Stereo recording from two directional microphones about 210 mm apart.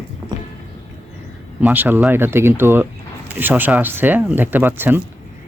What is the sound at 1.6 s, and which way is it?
Speech, 10° right (ahead or behind).